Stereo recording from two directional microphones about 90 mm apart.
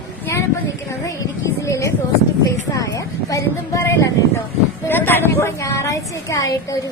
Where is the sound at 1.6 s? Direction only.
40° left (ahead or behind).